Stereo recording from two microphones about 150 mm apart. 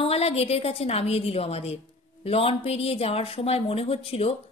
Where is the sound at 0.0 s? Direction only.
40° left (ahead or behind).